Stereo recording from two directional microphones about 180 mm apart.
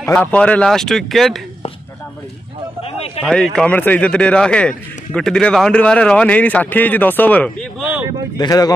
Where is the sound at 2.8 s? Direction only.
35° left (ahead or behind).